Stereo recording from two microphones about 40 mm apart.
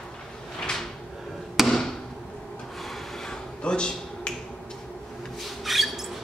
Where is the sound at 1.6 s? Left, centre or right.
Centre.